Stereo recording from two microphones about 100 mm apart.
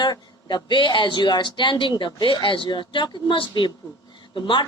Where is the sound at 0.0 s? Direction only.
50° left (ahead or behind).